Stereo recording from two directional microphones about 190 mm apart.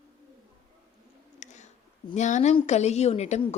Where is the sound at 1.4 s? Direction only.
40° left (ahead or behind).